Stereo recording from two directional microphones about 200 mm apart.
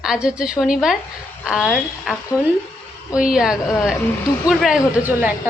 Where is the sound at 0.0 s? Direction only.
5° right (ahead or behind).